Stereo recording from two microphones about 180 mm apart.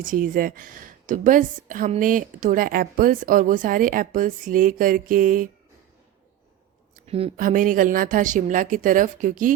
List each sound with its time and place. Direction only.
0.0 s speech: 50° right (ahead or behind)
7.3 s speech: 50° right (ahead or behind)